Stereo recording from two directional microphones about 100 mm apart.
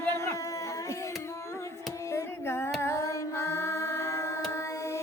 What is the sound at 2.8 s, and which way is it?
Singing, 30° left (ahead or behind).